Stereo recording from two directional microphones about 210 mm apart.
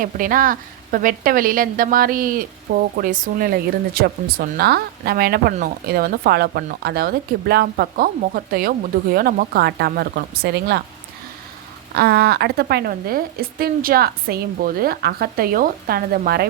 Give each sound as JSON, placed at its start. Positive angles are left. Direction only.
{"t": 0.0, "sound": "speech", "side_deg": -40}
{"t": 11.9, "sound": "speech", "side_deg": -50}